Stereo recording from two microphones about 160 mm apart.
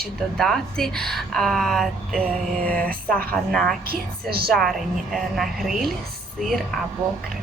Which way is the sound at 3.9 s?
70° right (ahead or behind).